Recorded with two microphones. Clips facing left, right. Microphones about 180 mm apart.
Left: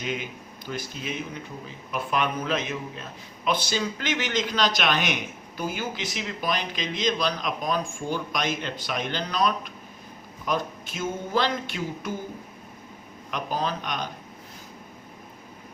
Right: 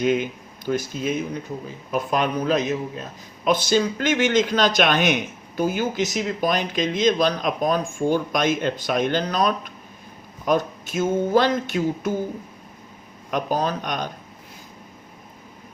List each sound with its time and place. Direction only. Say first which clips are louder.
0.0 s a man's voice: right 10 dB; 50° right (ahead or behind)
13.3 s a man's voice: right 5 dB; 45° right (ahead or behind)